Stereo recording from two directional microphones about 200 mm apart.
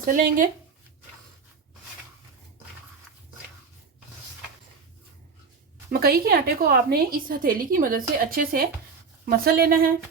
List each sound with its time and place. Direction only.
0.0 s a woman's voice: 40° right (ahead or behind)
5.9 s a woman's voice: 50° right (ahead or behind)